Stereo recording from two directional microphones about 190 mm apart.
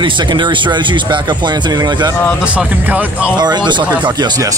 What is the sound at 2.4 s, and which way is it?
Speech, 5° right (ahead or behind).